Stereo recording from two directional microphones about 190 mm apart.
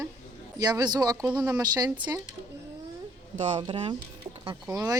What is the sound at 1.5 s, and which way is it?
Speech, 20° right (ahead or behind).